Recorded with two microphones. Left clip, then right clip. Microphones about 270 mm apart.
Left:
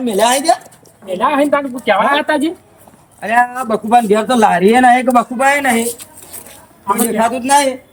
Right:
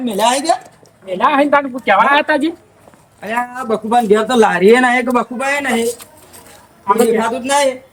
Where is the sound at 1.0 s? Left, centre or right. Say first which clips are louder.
Right 1 dB; centre.